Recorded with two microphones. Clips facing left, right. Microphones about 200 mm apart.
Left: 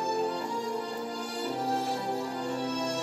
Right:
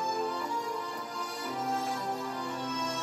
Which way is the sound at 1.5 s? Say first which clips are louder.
Left 2 dB; 30° left (ahead or behind).